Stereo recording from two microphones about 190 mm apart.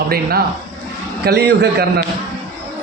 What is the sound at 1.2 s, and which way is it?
Speech, 60° right (ahead or behind).